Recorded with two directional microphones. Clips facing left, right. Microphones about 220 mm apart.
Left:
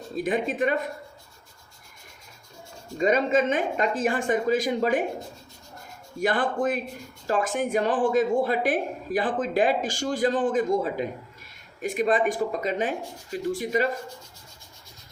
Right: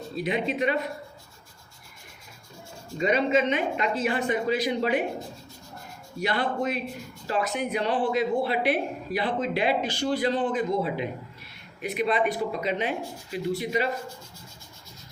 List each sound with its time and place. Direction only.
0.2 s speech: 45° left (ahead or behind)
3.0 s speech: 45° left (ahead or behind)
6.1 s speech: 50° left (ahead or behind)